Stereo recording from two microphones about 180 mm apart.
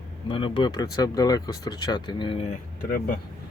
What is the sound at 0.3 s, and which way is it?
Speech, 30° left (ahead or behind).